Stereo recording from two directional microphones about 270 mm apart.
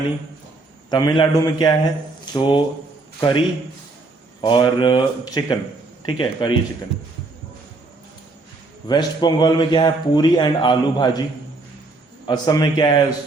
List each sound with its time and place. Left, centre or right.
0.9 s a man's voice: centre
8.9 s a man's voice: centre
12.3 s a man's voice: centre